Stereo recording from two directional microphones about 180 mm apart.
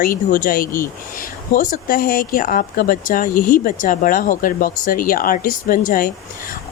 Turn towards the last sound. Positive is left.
turn(degrees=50)  # may be behind; listen again after turning